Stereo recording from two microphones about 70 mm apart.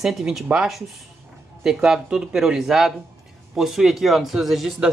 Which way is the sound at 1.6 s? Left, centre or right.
Centre.